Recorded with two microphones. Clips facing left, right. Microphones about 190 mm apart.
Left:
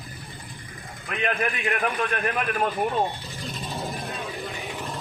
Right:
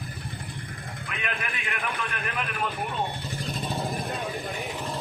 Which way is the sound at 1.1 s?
40° left (ahead or behind).